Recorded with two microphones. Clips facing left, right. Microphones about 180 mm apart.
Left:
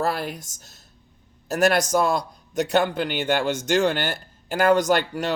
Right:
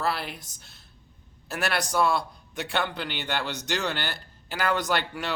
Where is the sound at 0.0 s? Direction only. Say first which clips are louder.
Left 4 dB; 45° left (ahead or behind).